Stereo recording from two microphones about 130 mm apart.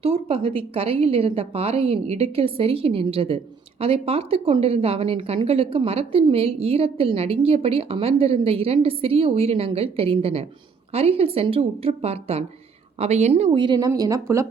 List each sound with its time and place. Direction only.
0.0 s a woman's voice: 50° right (ahead or behind)
13.6 s speech: 30° right (ahead or behind)